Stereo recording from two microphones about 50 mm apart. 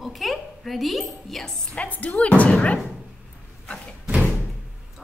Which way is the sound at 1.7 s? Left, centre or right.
Left.